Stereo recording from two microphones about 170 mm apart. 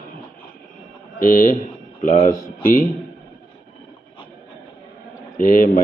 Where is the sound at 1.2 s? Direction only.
50° left (ahead or behind).